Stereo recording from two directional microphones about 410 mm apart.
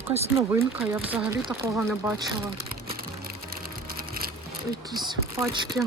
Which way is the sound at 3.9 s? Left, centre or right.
Right.